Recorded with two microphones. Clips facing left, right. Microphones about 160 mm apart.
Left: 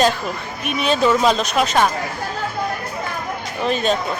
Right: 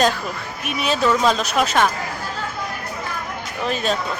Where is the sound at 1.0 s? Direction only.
10° left (ahead or behind).